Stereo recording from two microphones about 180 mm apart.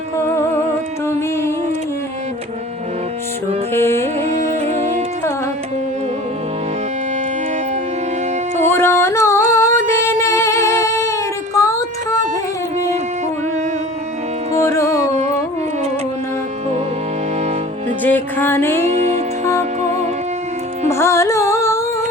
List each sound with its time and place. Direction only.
1.0 s music: 15° left (ahead or behind)
3.7 s music: 15° left (ahead or behind)
4.3 s music: 40° right (ahead or behind)
8.6 s music: 10° left (ahead or behind)
14.5 s carnatic music: 15° left (ahead or behind)
18.0 s music: 10° left (ahead or behind)
18.9 s music: 40° right (ahead or behind)
20.9 s carnatic music: 15° left (ahead or behind)